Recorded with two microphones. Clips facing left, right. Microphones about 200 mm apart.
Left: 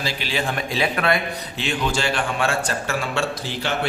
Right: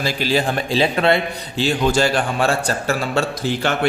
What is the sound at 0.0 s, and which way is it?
A man's voice, 40° right (ahead or behind).